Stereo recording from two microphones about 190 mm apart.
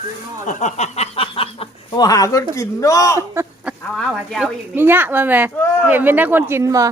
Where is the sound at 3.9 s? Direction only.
Centre (ahead or behind).